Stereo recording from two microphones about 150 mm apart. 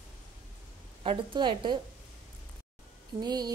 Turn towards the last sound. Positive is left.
turn(degrees=-25)  # may be behind; listen again after turning